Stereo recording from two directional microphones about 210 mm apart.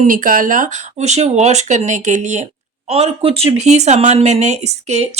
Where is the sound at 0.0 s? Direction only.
40° right (ahead or behind).